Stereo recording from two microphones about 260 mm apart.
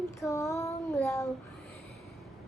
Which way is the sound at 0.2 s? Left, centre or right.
Centre.